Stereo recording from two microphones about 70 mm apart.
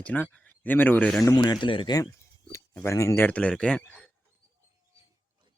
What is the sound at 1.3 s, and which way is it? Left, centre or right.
Speech, left.